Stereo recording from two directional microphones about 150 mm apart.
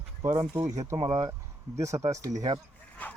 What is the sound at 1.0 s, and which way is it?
Speech, 35° right (ahead or behind).